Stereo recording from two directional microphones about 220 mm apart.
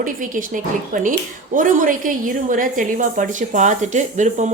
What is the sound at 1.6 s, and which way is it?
A woman's voice, 35° right (ahead or behind).